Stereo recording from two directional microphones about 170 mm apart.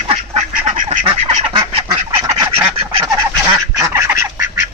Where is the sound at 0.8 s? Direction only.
35° right (ahead or behind).